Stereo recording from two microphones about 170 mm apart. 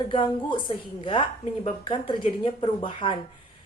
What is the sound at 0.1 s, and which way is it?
Speech, 30° left (ahead or behind).